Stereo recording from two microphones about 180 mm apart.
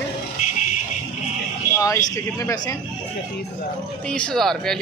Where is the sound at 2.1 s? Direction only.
15° left (ahead or behind).